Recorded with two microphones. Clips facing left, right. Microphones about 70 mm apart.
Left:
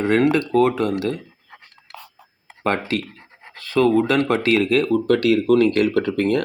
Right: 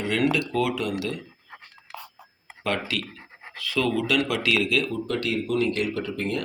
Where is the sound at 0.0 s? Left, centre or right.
Left.